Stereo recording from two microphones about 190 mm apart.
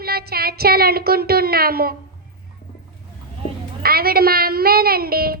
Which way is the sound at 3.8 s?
55° right (ahead or behind).